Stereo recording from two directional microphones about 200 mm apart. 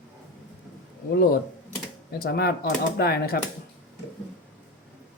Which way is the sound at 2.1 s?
50° left (ahead or behind).